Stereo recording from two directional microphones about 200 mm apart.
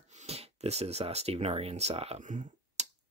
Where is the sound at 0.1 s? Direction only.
35° right (ahead or behind).